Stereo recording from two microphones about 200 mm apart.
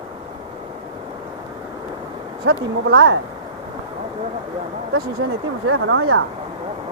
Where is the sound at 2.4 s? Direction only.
75° right (ahead or behind).